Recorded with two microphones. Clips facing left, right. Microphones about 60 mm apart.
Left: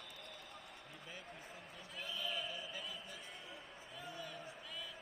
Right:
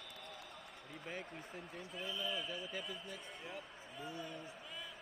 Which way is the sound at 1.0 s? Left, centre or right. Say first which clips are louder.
Right 6 dB; right.